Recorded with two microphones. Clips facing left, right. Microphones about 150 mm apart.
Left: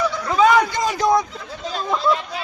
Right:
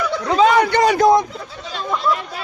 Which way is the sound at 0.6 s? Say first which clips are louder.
Right 7 dB; 70° right (ahead or behind).